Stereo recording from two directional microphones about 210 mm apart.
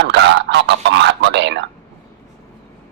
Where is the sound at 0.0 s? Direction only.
55° right (ahead or behind).